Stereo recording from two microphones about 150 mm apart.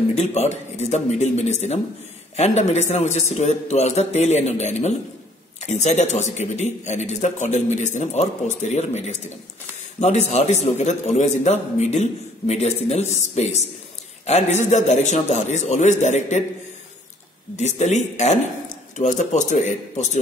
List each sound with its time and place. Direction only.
0.1 s a man's voice: 45° left (ahead or behind)
17.6 s a man's voice: 50° left (ahead or behind)